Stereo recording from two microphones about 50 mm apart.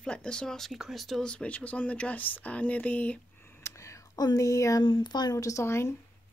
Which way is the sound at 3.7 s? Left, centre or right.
Left.